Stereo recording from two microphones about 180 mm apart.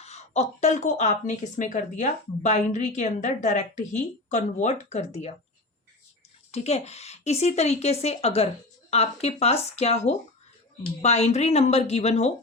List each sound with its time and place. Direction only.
0.0 s speech: 40° left (ahead or behind)
6.5 s speech: 35° left (ahead or behind)